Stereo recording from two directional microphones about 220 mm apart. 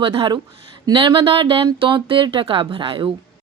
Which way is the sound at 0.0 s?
25° right (ahead or behind).